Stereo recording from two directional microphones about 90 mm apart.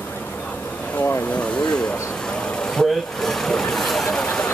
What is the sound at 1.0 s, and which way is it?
Speech, 25° left (ahead or behind).